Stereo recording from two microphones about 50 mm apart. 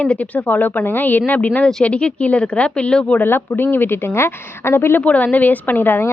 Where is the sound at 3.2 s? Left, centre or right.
Left.